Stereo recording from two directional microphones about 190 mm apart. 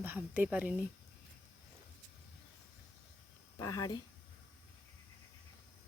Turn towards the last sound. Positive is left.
turn(degrees=20)  # may be behind; listen again after turning